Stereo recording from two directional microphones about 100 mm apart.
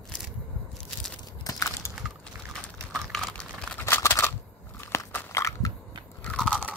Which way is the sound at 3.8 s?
20° left (ahead or behind).